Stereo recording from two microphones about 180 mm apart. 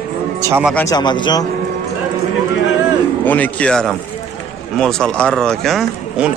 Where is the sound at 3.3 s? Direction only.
10° left (ahead or behind).